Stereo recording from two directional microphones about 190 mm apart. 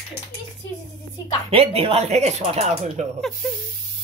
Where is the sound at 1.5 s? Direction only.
30° right (ahead or behind).